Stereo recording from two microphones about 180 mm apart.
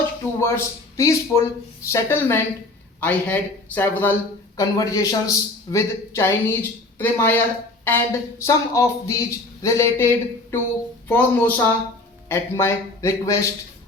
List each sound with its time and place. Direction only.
0.3 s a man's voice: 15° left (ahead or behind)